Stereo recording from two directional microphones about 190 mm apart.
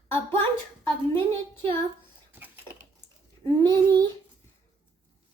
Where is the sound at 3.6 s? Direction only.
20° right (ahead or behind).